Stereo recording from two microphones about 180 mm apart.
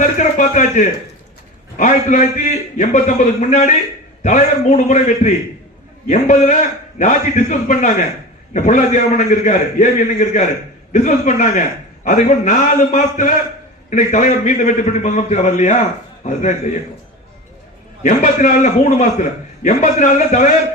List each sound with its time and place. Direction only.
0.0 s a sound: 45° left (ahead or behind)
1.7 s a man's voice: 45° left (ahead or behind)
18.0 s a man's voice: 45° left (ahead or behind)